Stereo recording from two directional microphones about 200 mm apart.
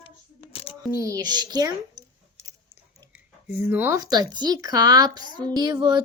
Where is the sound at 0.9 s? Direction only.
15° right (ahead or behind).